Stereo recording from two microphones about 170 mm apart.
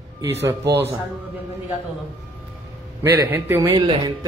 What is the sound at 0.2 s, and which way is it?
Speech, 90° right.